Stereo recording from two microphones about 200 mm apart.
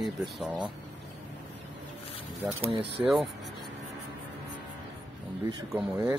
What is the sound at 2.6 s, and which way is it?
Speech, 30° right (ahead or behind).